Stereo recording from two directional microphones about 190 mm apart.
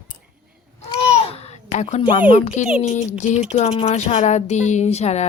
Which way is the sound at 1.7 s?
35° left (ahead or behind).